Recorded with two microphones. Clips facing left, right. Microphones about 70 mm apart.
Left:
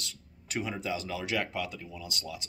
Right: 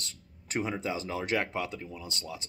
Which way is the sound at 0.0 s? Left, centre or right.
Right.